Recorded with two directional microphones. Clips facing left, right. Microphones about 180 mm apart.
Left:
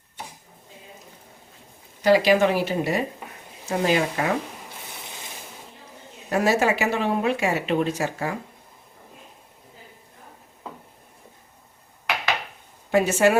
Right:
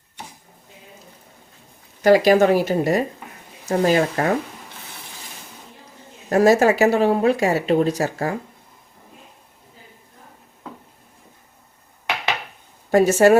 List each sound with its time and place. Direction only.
2.0 s speech: 45° right (ahead or behind)
6.3 s speech: 40° right (ahead or behind)
12.9 s speech: 40° right (ahead or behind)